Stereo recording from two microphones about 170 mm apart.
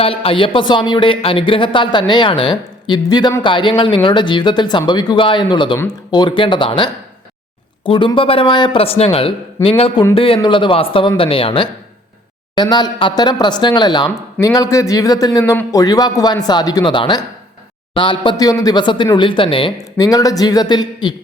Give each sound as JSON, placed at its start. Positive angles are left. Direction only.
{"t": 0.0, "sound": "speech", "side_deg": 35}